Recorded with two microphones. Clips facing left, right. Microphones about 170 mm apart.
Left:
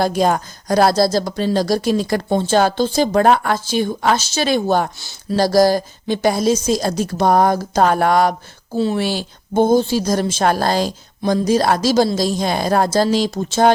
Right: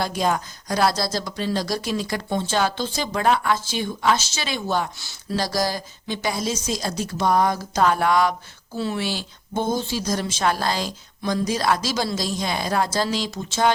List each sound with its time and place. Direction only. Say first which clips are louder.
0.0 s speech: left 7 dB; 45° left (ahead or behind)